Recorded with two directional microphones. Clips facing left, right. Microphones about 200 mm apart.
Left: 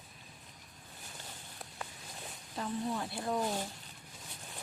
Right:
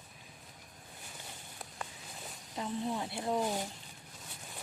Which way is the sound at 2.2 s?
10° right (ahead or behind).